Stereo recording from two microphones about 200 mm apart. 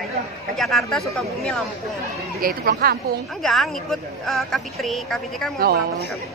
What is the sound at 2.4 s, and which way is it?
Speech, 50° right (ahead or behind).